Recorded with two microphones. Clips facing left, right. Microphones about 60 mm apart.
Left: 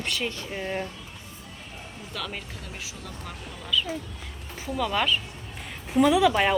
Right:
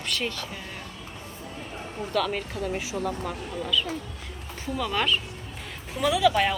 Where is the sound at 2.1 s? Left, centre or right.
Centre.